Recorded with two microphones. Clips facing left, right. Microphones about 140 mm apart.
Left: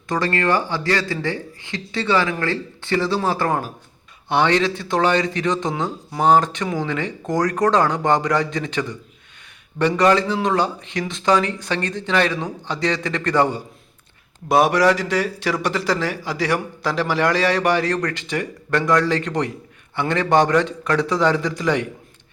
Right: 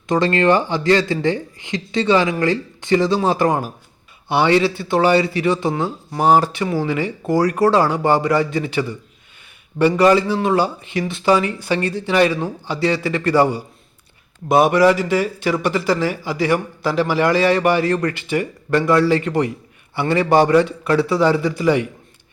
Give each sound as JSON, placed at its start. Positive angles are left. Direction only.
{"t": 0.1, "sound": "a man's voice", "side_deg": -20}